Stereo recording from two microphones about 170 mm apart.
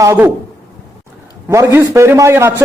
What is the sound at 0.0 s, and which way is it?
Speech, 15° right (ahead or behind).